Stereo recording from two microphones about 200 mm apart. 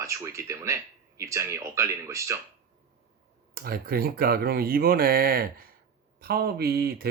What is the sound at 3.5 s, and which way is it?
Speech, 50° right (ahead or behind).